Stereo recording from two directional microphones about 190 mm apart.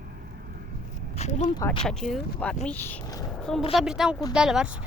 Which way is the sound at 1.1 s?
35° left (ahead or behind).